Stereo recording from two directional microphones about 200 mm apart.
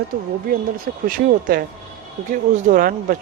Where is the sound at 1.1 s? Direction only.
45° right (ahead or behind).